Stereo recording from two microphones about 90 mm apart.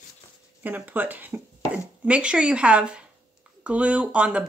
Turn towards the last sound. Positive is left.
turn(degrees=-15)  # may be behind; listen again after turning